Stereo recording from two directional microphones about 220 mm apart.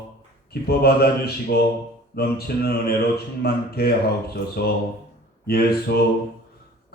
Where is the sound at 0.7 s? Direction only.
45° left (ahead or behind).